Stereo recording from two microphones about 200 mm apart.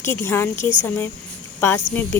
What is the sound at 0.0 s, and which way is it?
Speech, 10° left (ahead or behind).